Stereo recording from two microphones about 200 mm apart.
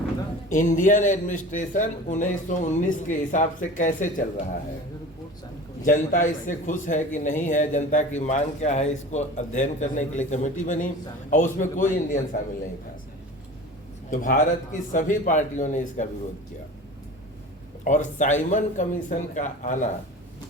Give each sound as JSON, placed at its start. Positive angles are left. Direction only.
{"t": 0.5, "sound": "a man's voice", "side_deg": 40}
{"t": 5.8, "sound": "a man's voice", "side_deg": 40}
{"t": 14.1, "sound": "a man's voice", "side_deg": 40}
{"t": 17.8, "sound": "a man's voice", "side_deg": 40}